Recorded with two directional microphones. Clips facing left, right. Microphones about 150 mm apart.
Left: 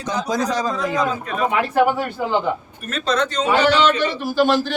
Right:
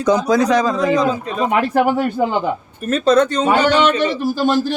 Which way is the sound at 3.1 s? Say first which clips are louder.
Right 5 dB; 45° right (ahead or behind).